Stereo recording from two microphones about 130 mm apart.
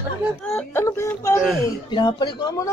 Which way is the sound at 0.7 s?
20° left (ahead or behind).